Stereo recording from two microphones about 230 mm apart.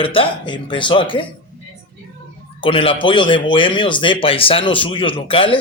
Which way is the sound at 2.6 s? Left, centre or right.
Left.